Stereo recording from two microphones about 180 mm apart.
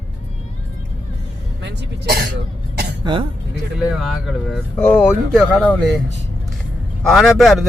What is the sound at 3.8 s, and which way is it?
Speech, centre (ahead or behind).